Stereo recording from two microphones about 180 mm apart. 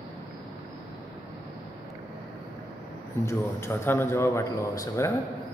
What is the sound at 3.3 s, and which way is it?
A man's voice, 15° left (ahead or behind).